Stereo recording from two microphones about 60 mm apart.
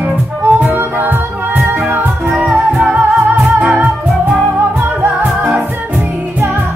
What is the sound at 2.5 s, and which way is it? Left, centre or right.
Music, centre.